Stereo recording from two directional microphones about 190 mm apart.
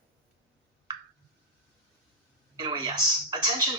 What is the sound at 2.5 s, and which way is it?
Speech, 25° right (ahead or behind).